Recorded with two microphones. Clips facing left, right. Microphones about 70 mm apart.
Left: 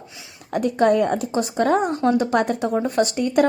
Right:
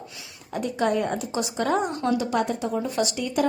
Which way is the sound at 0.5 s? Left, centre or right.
Left.